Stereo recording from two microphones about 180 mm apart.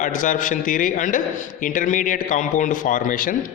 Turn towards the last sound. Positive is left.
turn(degrees=50)  # may be behind; listen again after turning